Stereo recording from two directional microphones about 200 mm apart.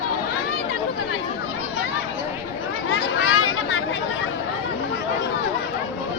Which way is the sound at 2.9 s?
90° left.